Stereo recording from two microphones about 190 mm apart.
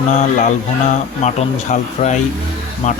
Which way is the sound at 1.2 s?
35° left (ahead or behind).